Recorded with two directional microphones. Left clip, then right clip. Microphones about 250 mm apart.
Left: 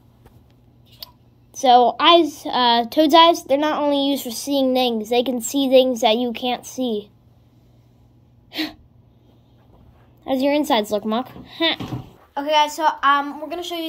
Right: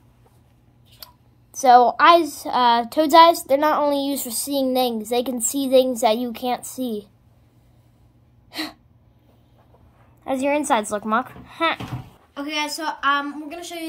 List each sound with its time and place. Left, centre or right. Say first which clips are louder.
1.0 s a sound: left 5 dB; centre
3.5 s a woman's voice: right 1 dB; right
3.9 s a sound: left 3 dB; centre
6.0 s a woman's voice: left 2 dB; centre
10.2 s speech: left 2 dB; right
12.4 s a woman's voice: left 8 dB; centre